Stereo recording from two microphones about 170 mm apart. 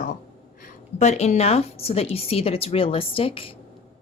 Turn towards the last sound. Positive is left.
turn(degrees=35)  # may be behind; listen again after turning